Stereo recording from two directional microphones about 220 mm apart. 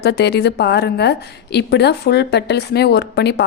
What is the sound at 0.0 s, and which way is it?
A woman's voice, 50° left (ahead or behind).